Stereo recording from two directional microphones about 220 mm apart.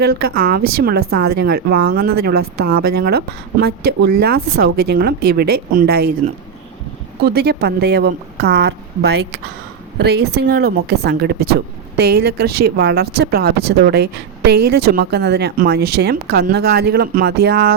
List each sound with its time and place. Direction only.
0.0 s speech: 45° right (ahead or behind)